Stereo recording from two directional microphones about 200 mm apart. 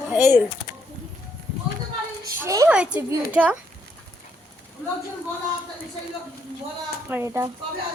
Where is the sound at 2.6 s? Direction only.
5° right (ahead or behind).